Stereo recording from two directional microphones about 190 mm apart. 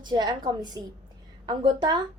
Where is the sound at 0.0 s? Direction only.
25° right (ahead or behind).